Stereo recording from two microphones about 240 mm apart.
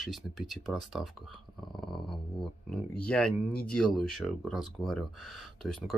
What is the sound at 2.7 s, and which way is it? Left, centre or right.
Speech, centre.